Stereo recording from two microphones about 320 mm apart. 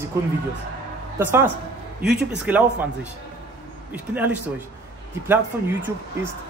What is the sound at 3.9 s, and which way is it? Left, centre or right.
Speech, centre.